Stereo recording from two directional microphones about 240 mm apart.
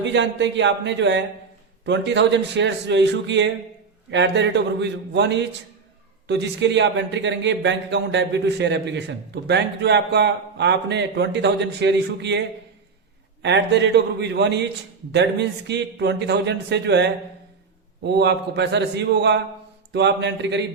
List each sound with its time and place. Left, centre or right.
0.0 s speech: right
13.4 s speech: right